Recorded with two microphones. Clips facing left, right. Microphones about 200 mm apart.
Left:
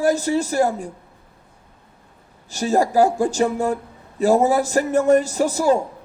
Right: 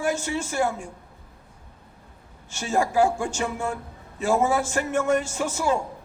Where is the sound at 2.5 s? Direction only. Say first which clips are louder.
Left 6 dB; 35° left (ahead or behind).